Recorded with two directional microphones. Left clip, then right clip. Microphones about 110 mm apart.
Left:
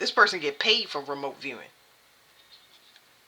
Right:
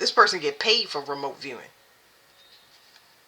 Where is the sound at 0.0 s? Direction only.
30° left (ahead or behind).